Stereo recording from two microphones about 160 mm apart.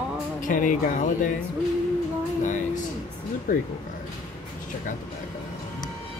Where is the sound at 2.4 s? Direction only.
50° left (ahead or behind).